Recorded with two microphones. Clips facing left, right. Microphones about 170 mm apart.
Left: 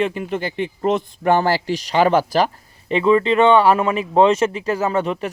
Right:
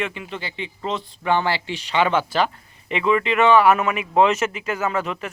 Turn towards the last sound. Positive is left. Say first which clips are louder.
# left 4 dB
turn(degrees=35)  # may be behind; listen again after turning